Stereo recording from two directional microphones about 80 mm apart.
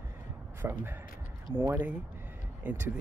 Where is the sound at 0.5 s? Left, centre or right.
Right.